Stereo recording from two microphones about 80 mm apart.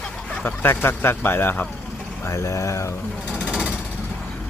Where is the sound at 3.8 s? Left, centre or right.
Centre.